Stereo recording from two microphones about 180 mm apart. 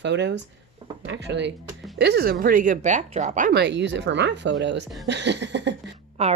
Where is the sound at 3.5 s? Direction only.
75° right (ahead or behind).